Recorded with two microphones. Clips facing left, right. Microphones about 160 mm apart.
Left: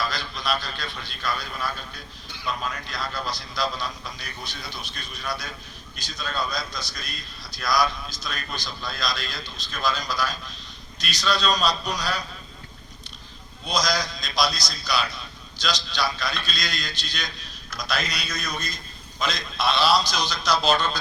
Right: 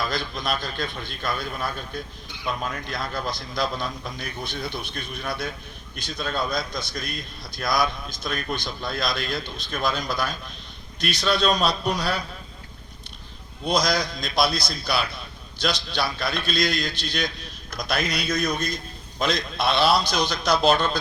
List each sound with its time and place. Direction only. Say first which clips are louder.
0.0 s a man's voice: right 2 dB; 50° right (ahead or behind)
13.7 s a man's voice: right 3 dB; 55° right (ahead or behind)